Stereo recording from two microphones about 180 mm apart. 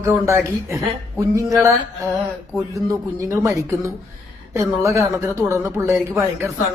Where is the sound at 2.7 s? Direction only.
15° right (ahead or behind).